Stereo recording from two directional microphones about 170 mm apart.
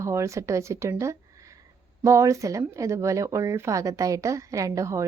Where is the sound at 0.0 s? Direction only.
15° right (ahead or behind).